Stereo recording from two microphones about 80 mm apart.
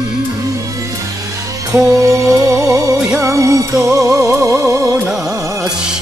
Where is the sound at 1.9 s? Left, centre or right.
Right.